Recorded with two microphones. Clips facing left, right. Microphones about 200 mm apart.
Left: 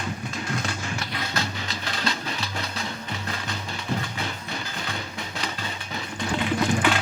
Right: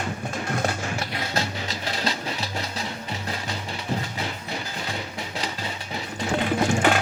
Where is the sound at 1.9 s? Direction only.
35° right (ahead or behind).